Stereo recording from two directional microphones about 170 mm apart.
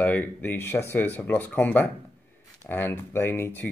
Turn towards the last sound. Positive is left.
turn(degrees=10)  # may be behind; listen again after turning